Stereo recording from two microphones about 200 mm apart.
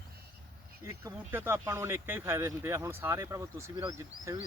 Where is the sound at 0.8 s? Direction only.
10° right (ahead or behind).